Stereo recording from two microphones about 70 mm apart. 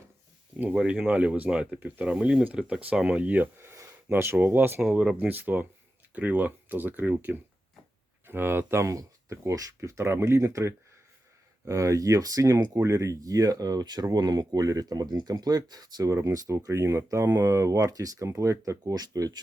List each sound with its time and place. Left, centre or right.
0.8 s speech: centre; by 4.8 s right
4.8 s speech: centre
5.1 s speech: right
8.9 s speech: right
16.0 s speech: right
18.9 s speech: right